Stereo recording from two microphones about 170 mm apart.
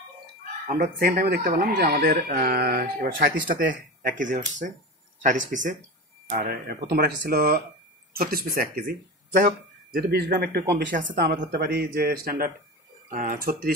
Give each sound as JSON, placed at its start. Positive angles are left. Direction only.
{"t": 0.7, "sound": "speech", "side_deg": -60}
{"t": 6.3, "sound": "a man's voice", "side_deg": -65}
{"t": 10.7, "sound": "speech", "side_deg": -90}
{"t": 11.1, "sound": "speech", "side_deg": -70}